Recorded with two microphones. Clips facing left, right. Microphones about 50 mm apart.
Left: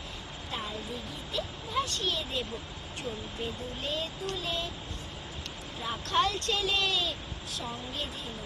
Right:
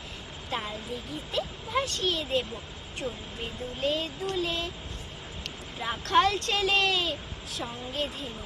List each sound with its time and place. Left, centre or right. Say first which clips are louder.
1.3 s speech: right 4 dB; right
3.8 s speech: right 6 dB; right
5.8 s speech: right 5 dB; right